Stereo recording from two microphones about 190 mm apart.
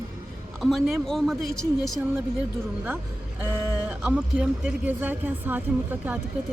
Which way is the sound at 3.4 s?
10° right (ahead or behind).